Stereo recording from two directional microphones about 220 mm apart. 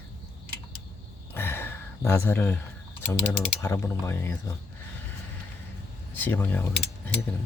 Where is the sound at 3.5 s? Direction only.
15° left (ahead or behind).